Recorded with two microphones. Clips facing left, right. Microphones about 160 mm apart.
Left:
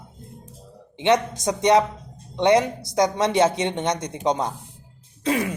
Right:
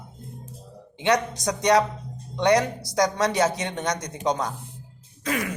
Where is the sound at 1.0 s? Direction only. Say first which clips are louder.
Left 3 dB; 25° left (ahead or behind).